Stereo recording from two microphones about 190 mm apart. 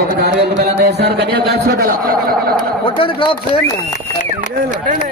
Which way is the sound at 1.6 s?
50° right (ahead or behind).